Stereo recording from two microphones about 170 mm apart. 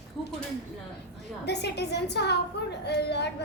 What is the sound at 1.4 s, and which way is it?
A child's voice, 80° left.